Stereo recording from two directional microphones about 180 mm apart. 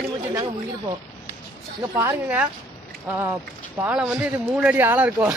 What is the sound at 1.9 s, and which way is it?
Speech, 10° right (ahead or behind).